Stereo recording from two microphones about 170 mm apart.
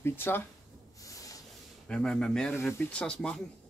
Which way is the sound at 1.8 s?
5° left (ahead or behind).